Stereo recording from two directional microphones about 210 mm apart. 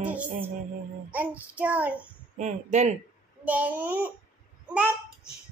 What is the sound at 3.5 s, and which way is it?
Child singing, 5° right (ahead or behind).